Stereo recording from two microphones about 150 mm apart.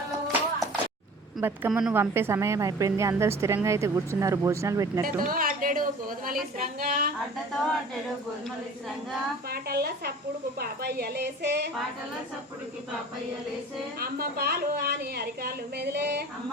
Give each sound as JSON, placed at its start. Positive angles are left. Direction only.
{"t": 1.4, "sound": "a woman's voice", "side_deg": -15}
{"t": 5.0, "sound": "a woman's voice", "side_deg": -75}
{"t": 9.5, "sound": "a woman's voice", "side_deg": -90}
{"t": 14.0, "sound": "a woman's voice", "side_deg": -90}